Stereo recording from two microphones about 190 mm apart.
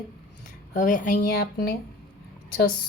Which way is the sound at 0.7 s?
40° left (ahead or behind).